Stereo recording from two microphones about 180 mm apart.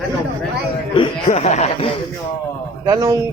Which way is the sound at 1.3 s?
40° left (ahead or behind).